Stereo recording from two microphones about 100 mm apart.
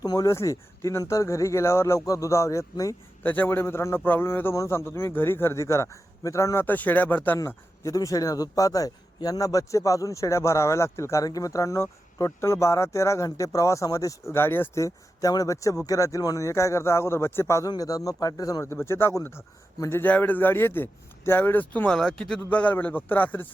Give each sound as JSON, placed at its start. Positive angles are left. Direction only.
{"t": 0.0, "sound": "speech", "side_deg": 40}
{"t": 3.2, "sound": "a man's voice", "side_deg": 15}
{"t": 6.7, "sound": "a man's voice", "side_deg": 15}
{"t": 7.3, "sound": "a man's voice", "side_deg": 30}
{"t": 17.7, "sound": "speech", "side_deg": 35}
{"t": 18.6, "sound": "a man's voice", "side_deg": 25}